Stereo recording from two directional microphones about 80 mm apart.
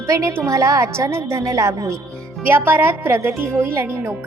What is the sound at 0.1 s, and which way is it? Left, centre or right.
A woman's voice, right.